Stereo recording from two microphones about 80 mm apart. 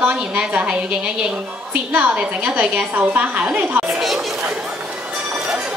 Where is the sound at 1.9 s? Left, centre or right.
Centre.